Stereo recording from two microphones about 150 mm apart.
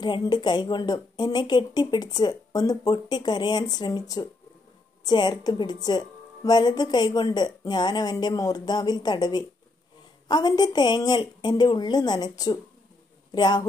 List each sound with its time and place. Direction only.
0.0 s a woman's voice: 30° left (ahead or behind)